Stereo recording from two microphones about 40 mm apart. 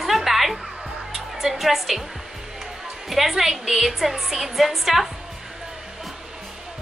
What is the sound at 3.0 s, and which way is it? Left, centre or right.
A woman's voice, centre.